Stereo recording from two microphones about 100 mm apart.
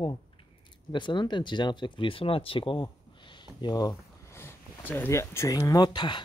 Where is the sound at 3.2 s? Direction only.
50° left (ahead or behind).